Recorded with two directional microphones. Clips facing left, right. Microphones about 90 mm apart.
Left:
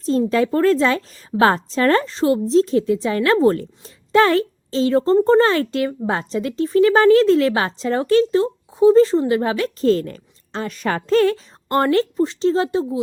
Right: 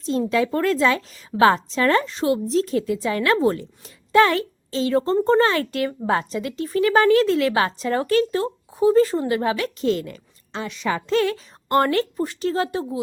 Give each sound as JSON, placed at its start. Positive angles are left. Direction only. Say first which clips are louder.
{"t": 0.3, "sound": "a woman's voice", "louder": "left 4 dB", "side_deg": 35}